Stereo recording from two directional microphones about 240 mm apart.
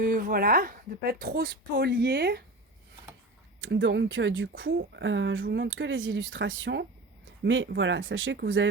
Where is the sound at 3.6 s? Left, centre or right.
Right.